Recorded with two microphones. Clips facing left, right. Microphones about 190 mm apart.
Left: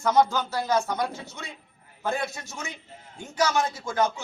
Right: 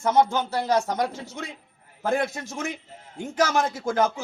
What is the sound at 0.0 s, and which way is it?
Speech, 25° right (ahead or behind).